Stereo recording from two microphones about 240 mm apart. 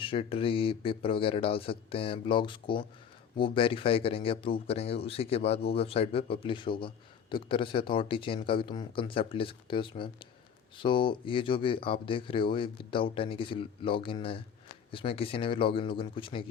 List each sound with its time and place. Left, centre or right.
0.0 s a man's voice: left